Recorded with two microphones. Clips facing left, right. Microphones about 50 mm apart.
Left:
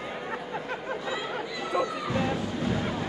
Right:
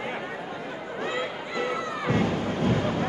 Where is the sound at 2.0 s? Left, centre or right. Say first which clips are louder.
Right 3 dB; right.